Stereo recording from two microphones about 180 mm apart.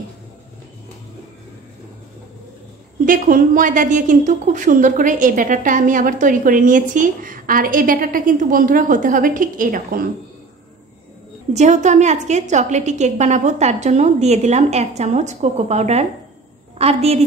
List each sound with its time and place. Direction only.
3.1 s a woman's voice: 50° right (ahead or behind)
11.5 s a woman's voice: 40° right (ahead or behind)